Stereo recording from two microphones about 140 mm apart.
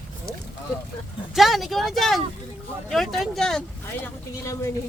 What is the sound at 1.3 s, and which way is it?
Speech, centre (ahead or behind).